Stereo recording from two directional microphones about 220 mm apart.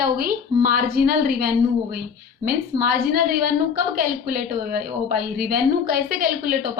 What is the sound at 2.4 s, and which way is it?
A woman's voice, 40° right (ahead or behind).